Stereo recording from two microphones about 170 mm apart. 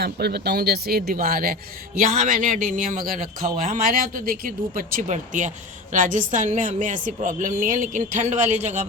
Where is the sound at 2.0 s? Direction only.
45° right (ahead or behind).